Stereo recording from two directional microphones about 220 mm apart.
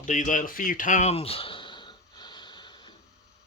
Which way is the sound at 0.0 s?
35° left (ahead or behind).